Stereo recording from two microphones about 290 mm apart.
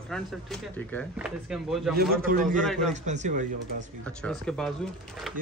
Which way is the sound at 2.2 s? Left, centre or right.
Right.